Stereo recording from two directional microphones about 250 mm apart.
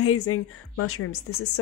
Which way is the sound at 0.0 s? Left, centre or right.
Left.